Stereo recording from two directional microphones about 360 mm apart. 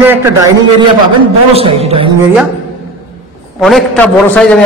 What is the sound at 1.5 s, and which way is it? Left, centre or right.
Speech, centre.